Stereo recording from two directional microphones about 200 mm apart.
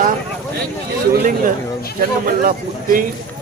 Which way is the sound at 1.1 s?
45° right (ahead or behind).